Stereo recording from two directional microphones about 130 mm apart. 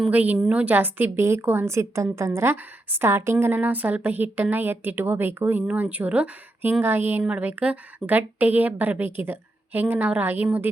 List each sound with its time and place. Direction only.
0.1 s a woman's voice: 10° right (ahead or behind)